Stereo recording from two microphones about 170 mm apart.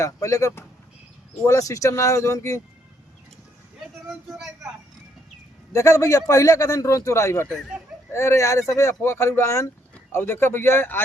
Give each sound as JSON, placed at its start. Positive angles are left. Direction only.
{"t": 0.0, "sound": "a man's voice", "side_deg": 20}
{"t": 5.7, "sound": "a man's voice", "side_deg": 20}